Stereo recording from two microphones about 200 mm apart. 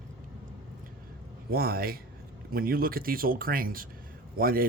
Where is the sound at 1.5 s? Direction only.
50° right (ahead or behind).